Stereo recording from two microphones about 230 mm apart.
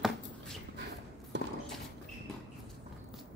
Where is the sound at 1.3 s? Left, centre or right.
Right.